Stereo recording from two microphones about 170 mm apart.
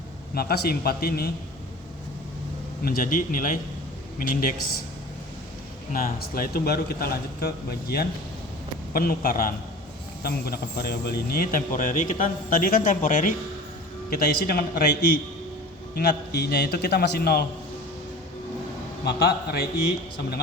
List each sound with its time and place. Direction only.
0.3 s a man's voice: 70° left (ahead or behind)
2.8 s a man's voice: 60° left (ahead or behind)
5.9 s a man's voice: 55° left (ahead or behind)
14.1 s a man's voice: 65° left (ahead or behind)
16.0 s a man's voice: 70° left (ahead or behind)
19.0 s a man's voice: 65° left (ahead or behind)